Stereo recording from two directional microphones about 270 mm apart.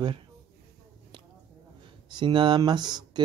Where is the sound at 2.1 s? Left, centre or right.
Centre.